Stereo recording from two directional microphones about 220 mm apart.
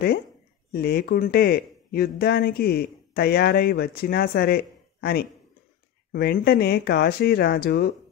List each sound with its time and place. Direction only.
0.7 s speech: 45° left (ahead or behind)